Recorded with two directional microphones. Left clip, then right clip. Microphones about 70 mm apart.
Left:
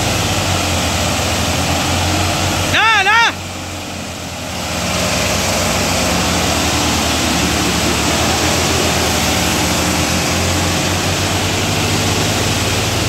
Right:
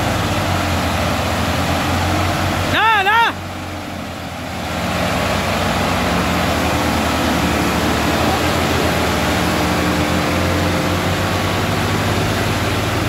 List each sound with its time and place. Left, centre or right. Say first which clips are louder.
2.7 s vehicle: left 2 dB; right